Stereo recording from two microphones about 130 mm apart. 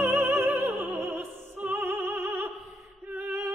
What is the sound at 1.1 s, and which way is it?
Opera, 15° right (ahead or behind).